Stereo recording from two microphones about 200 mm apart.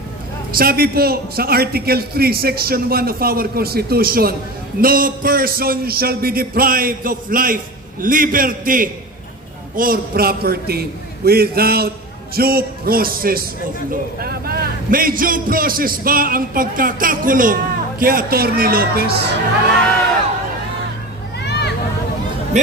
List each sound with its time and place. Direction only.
0.5 s a man's voice: 50° right (ahead or behind)
21.4 s a sound: 60° left (ahead or behind)
22.5 s music: 35° right (ahead or behind)